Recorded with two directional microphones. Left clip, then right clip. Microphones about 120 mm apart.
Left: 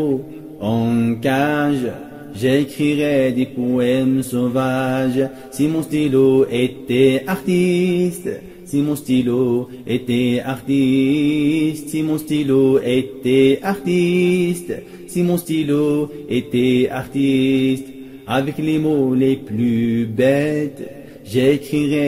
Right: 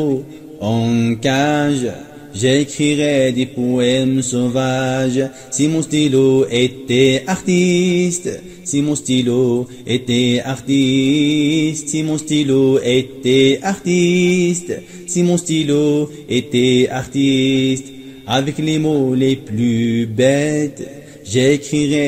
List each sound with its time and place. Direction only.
0.6 s mantra: 35° right (ahead or behind)